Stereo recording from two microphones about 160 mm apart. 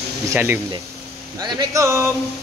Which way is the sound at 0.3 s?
15° right (ahead or behind).